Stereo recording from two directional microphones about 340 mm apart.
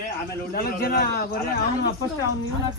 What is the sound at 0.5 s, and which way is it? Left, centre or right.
Speech, left.